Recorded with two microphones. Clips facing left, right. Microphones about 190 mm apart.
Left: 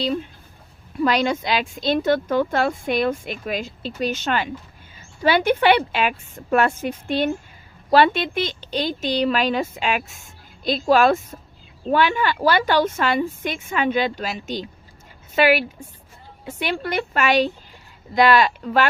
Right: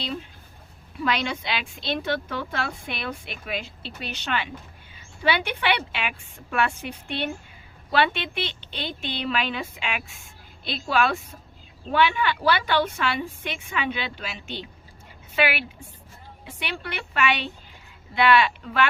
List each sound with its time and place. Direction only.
0.9 s speech: 40° left (ahead or behind)